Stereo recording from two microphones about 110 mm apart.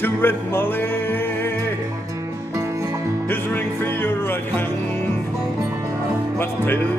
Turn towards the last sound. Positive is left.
turn(degrees=20)  # may be behind; listen again after turning